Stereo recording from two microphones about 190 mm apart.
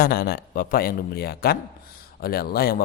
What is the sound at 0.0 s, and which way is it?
Speech, 50° left (ahead or behind).